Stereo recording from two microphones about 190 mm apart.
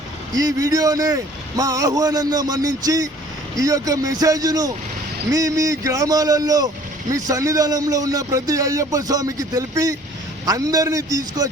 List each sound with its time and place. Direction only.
0.3 s a man's voice: 20° right (ahead or behind)